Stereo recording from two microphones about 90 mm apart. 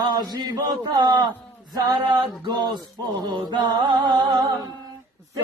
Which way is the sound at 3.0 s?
55° right (ahead or behind).